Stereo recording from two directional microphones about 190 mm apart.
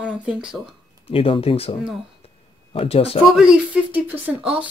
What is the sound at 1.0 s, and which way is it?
Speech, 30° left (ahead or behind).